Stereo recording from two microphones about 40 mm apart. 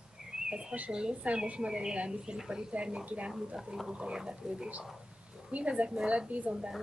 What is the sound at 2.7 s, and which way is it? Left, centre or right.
Speech, right.